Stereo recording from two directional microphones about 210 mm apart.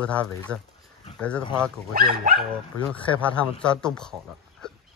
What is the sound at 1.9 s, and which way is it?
Speech, 45° right (ahead or behind).